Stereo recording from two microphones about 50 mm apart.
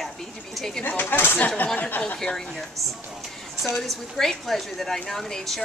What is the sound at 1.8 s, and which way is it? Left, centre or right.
Speech, left.